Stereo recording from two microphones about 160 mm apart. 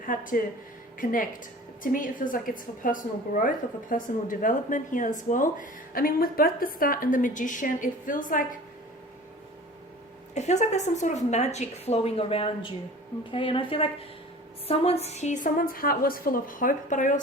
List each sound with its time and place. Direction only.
0.0 s a woman's voice: 55° left (ahead or behind)
10.3 s a woman's voice: 45° left (ahead or behind)